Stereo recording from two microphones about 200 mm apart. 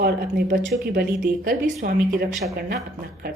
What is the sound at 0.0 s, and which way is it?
Speech, 50° right (ahead or behind).